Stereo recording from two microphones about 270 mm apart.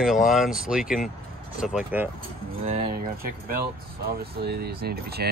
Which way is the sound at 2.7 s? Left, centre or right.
Right.